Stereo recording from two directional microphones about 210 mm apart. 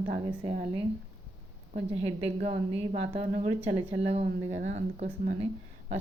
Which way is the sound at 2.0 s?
30° right (ahead or behind).